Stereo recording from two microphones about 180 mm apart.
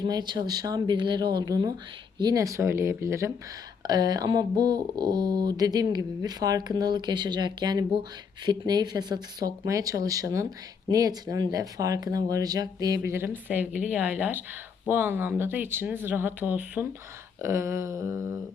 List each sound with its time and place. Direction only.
0.0 s speech: 20° right (ahead or behind)